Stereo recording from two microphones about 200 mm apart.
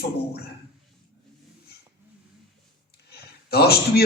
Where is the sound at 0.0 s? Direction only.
50° left (ahead or behind).